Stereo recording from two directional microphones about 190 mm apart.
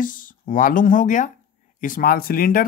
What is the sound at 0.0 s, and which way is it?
Speech, 45° left (ahead or behind).